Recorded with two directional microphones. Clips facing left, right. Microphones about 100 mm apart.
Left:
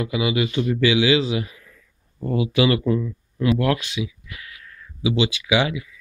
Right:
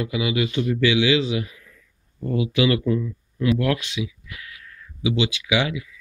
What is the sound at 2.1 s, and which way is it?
Speech, 20° left (ahead or behind).